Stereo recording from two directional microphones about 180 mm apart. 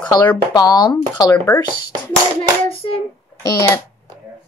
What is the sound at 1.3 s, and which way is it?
Speech, 15° left (ahead or behind).